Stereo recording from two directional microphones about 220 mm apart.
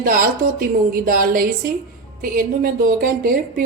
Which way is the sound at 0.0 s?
40° right (ahead or behind).